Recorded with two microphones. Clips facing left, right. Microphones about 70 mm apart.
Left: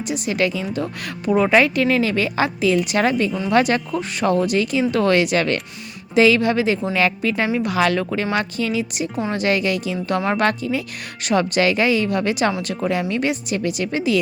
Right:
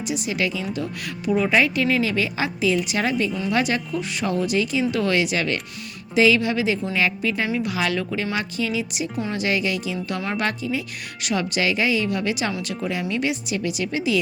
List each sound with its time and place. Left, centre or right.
0.0 s a woman's voice: left